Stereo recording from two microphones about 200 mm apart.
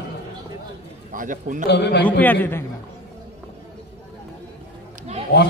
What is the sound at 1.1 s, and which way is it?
Speech, 40° right (ahead or behind).